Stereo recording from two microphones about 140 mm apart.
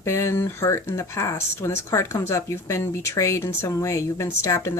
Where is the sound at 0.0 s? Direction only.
20° left (ahead or behind).